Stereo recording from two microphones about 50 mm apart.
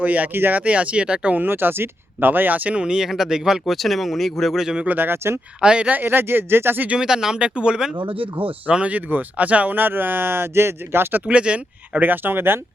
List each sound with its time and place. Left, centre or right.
0.0 s speech: right
0.6 s speech: right
1.5 s speech: right
2.6 s speech: right; by 4.5 s centre
4.5 s speech: centre
4.9 s speech: right
5.5 s speech: right
5.9 s speech: right
6.8 s speech: centre; by 11.2 s right
11.3 s speech: right
12.0 s speech: right